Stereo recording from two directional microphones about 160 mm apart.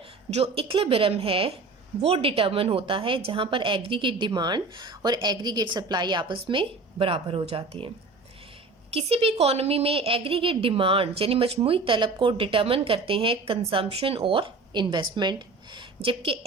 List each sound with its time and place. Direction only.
0.3 s a woman's voice: 40° right (ahead or behind)
8.9 s a woman's voice: 40° right (ahead or behind)